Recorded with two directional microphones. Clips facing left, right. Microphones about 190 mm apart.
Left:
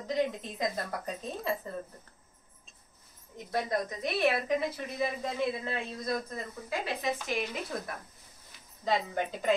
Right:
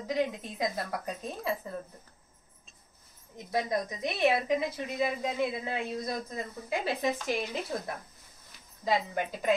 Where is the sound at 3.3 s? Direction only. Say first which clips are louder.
Right 1 dB; 15° right (ahead or behind).